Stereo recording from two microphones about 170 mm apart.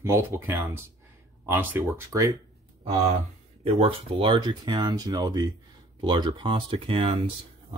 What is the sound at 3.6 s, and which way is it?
Speech, 35° right (ahead or behind).